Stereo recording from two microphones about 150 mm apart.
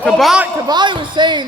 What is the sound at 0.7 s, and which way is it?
Speech, 30° right (ahead or behind).